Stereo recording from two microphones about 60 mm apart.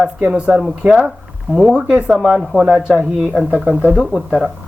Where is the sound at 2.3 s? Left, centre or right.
Centre.